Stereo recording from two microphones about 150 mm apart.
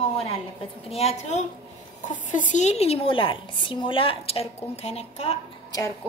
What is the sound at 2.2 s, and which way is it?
A woman's voice, 60° left (ahead or behind).